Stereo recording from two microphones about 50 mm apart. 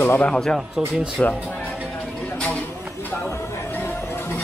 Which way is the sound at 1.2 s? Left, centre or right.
Left.